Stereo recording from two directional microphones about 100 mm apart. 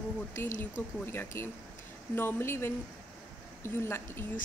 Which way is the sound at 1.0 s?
25° left (ahead or behind).